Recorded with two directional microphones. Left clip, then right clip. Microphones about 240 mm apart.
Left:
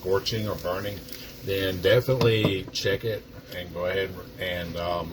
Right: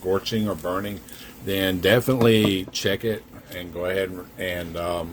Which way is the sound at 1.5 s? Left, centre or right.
Right.